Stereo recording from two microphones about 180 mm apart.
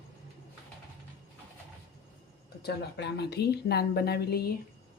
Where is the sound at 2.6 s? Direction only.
65° left (ahead or behind).